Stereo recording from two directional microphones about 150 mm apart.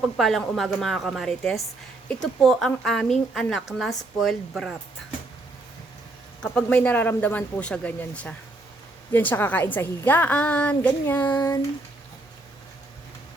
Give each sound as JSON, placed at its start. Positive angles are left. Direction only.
{"t": 0.2, "sound": "a woman's voice", "side_deg": 0}
{"t": 6.4, "sound": "a woman's voice", "side_deg": 5}
{"t": 11.3, "sound": "a sound", "side_deg": 25}